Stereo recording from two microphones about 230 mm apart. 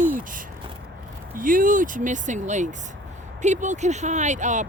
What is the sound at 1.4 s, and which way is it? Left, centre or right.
Speech, right.